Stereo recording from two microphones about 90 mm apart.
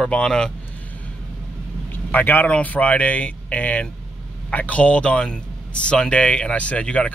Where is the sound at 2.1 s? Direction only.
20° left (ahead or behind).